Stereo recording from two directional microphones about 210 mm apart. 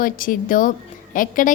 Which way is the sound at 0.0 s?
40° left (ahead or behind).